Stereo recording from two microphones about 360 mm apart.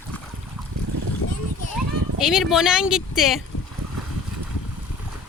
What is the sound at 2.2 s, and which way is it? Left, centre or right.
Speech, centre.